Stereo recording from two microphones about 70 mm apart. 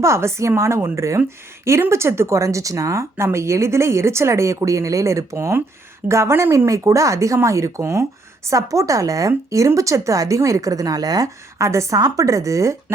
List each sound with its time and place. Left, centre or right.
0.0 s speech: right
11.5 s speech: right